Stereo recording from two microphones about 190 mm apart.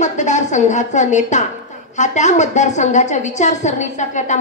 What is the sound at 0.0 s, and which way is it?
A woman's voice, 40° left (ahead or behind).